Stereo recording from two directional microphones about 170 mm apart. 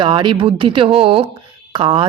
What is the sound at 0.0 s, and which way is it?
A woman's voice, 30° right (ahead or behind).